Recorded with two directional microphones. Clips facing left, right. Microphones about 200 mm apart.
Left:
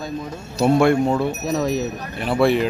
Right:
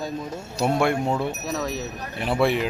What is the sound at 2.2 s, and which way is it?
Speech, 15° right (ahead or behind).